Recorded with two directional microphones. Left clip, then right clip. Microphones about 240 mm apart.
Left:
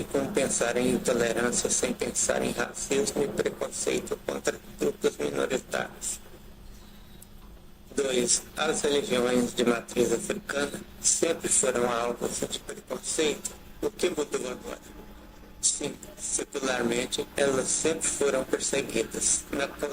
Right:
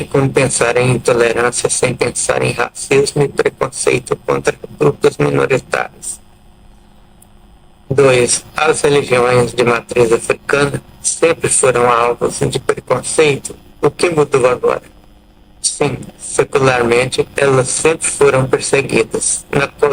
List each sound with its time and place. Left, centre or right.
0.1 s speech: right
7.9 s speech: right